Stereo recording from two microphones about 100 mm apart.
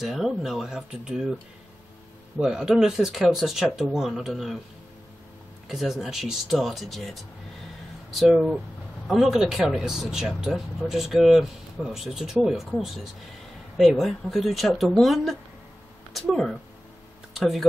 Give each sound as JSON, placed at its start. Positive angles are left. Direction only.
{"t": 0.0, "sound": "speech", "side_deg": -5}
{"t": 2.3, "sound": "speech", "side_deg": -10}
{"t": 5.7, "sound": "speech", "side_deg": 0}